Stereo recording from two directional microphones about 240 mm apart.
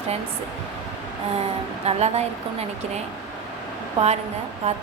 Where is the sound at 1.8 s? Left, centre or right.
Right.